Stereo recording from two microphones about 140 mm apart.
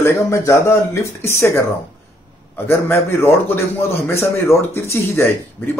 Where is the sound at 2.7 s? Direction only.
20° left (ahead or behind).